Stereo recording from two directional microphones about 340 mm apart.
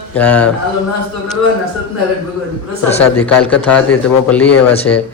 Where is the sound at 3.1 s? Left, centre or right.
Centre.